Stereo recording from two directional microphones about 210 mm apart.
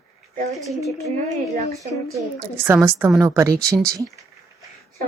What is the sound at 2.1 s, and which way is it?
A woman's voice, 10° right (ahead or behind).